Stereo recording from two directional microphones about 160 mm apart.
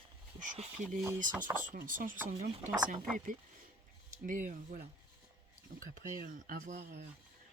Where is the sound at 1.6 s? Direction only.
60° right (ahead or behind).